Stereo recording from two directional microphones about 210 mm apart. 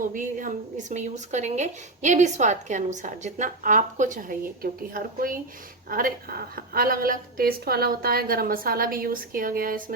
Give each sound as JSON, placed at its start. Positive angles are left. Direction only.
{"t": 0.1, "sound": "a woman's voice", "side_deg": -40}